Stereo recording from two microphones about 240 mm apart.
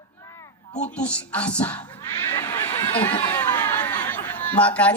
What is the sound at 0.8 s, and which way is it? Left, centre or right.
A woman's voice, centre.